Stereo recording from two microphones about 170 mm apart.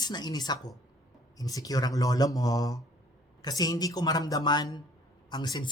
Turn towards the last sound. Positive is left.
turn(degrees=25)  # may be behind; listen again after turning